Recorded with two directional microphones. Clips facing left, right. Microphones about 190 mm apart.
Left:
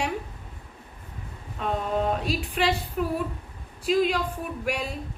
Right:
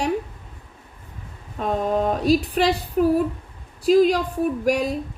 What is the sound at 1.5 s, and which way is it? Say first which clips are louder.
A woman's voice: right 5 dB; 40° right (ahead or behind).